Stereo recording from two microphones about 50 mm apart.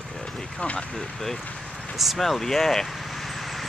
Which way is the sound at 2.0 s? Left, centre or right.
Centre.